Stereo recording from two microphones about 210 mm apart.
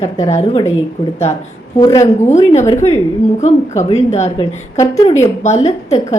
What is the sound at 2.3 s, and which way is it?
Speech, 35° left (ahead or behind).